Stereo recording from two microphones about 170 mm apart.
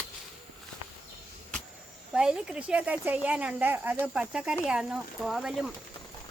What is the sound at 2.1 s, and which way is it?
Speech, 5° right (ahead or behind).